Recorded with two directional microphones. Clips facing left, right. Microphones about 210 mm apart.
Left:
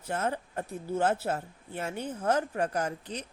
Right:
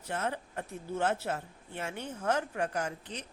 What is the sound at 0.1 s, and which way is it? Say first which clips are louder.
Speech: left 3 dB; 40° left (ahead or behind).